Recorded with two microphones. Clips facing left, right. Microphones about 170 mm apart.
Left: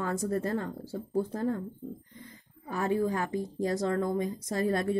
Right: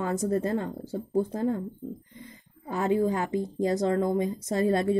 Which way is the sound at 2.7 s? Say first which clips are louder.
Right 3 dB; 20° right (ahead or behind).